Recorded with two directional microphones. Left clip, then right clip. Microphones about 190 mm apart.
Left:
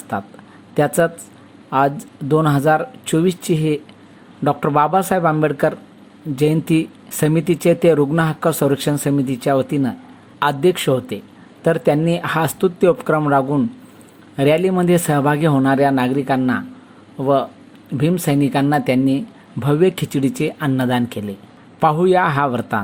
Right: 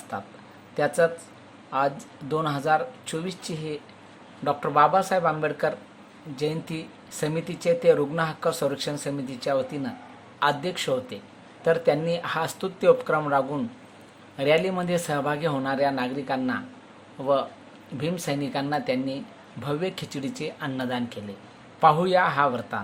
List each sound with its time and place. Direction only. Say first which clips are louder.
0.1 s speech: left 10 dB; 30° left (ahead or behind)